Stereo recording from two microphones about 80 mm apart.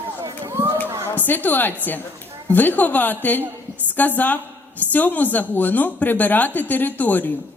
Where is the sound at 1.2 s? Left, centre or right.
Left.